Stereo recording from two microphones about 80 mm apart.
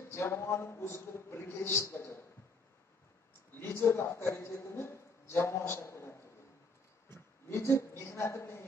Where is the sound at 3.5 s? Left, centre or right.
Left.